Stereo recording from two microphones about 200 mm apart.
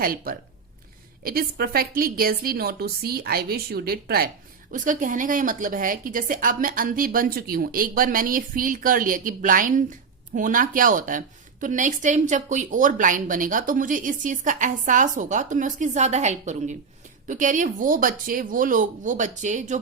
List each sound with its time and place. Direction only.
0.0 s a woman's voice: 45° right (ahead or behind)